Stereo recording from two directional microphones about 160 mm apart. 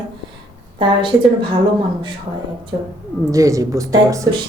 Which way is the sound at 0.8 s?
30° right (ahead or behind).